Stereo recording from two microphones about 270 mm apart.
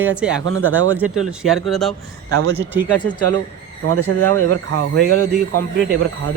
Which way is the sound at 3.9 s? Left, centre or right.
Right.